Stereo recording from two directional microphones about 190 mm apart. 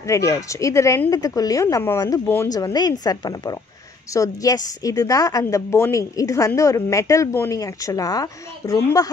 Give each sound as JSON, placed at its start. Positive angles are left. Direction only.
{"t": 0.0, "sound": "a woman's voice", "side_deg": 15}